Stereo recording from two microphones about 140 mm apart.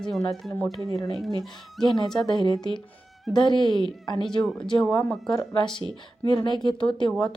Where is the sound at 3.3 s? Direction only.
35° left (ahead or behind).